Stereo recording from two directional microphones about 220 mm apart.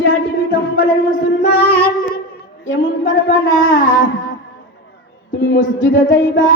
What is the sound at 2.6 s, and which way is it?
Speech, 60° left (ahead or behind).